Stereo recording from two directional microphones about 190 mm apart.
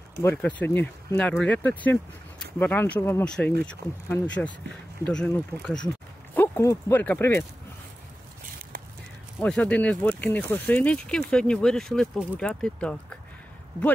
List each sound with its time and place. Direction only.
0.2 s speech: 10° left (ahead or behind)
5.0 s speech: 5° left (ahead or behind)
9.4 s speech: 5° left (ahead or behind)